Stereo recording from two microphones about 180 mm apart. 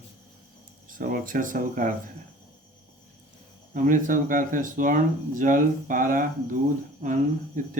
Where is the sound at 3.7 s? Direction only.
45° right (ahead or behind).